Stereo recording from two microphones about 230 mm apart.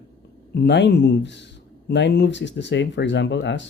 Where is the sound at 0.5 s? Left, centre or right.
Left.